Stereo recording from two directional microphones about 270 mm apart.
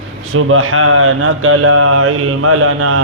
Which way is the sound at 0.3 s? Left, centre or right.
Right.